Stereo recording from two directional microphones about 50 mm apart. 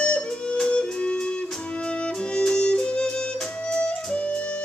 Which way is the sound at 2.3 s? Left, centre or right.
Centre.